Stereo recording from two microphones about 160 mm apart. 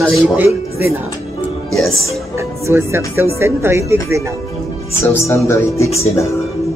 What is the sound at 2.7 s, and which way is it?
Speech, 15° right (ahead or behind).